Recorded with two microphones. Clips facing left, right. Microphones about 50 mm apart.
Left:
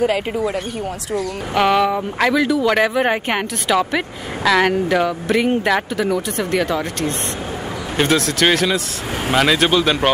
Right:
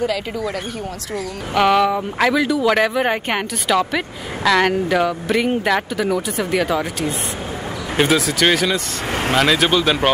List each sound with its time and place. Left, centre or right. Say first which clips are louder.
0.0 s speech: left 3 dB; left
1.1 s speech: left 1 dB; centre